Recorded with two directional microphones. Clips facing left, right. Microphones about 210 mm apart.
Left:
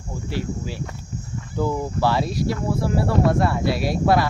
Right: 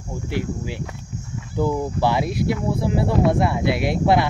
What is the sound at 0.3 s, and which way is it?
Speech, 15° right (ahead or behind).